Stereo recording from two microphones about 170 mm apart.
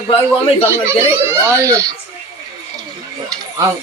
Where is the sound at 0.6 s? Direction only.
15° right (ahead or behind).